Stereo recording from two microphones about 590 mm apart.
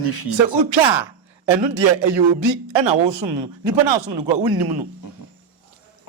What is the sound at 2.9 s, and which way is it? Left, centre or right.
A man's voice, right.